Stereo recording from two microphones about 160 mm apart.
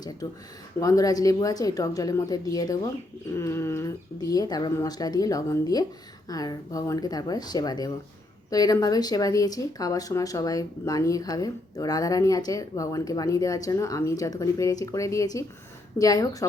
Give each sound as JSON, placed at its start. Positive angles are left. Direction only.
{"t": 0.8, "sound": "speech", "side_deg": 20}